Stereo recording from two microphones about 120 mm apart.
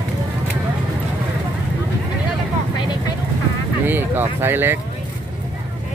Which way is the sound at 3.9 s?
15° right (ahead or behind).